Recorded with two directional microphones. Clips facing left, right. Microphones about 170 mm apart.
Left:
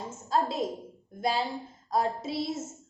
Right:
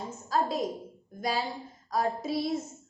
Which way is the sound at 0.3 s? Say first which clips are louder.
Left 1 dB; 25° left (ahead or behind).